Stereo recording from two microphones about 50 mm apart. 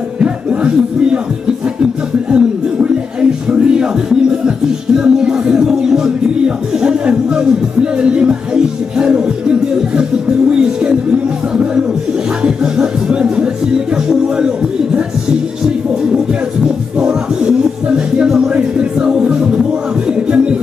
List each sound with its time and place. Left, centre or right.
0.2 s music: right
2.3 s music: centre
16.6 s music: centre